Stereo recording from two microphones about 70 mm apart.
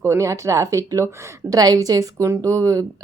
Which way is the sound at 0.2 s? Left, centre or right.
Right.